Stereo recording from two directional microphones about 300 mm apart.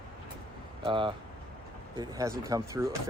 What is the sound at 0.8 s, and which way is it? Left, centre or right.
Speech, centre.